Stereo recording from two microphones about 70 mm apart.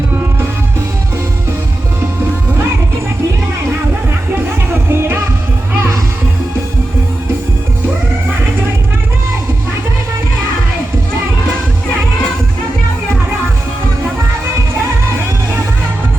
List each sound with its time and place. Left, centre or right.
0.1 s music: right
4.3 s music: right